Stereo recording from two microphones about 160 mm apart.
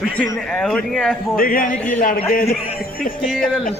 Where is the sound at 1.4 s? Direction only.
60° left (ahead or behind).